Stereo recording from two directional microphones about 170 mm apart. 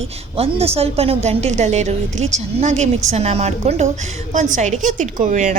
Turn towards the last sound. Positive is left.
turn(degrees=-45)  # may be behind; listen again after turning